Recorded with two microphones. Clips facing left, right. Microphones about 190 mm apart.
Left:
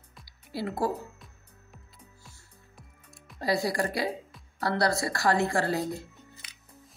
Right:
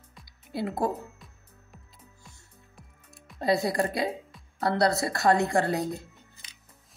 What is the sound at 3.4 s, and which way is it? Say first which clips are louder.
A woman's voice: right 2 dB; 25° right (ahead or behind).